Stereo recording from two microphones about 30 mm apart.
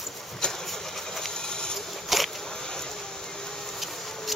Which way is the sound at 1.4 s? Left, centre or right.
Left.